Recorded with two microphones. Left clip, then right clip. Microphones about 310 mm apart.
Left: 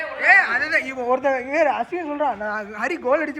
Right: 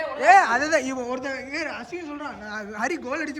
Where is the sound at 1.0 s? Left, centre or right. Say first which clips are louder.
Left 9 dB; centre.